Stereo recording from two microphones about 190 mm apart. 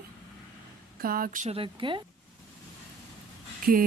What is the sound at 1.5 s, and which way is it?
Speech, 25° right (ahead or behind).